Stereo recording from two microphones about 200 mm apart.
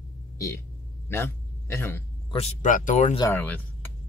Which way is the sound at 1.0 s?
10° left (ahead or behind).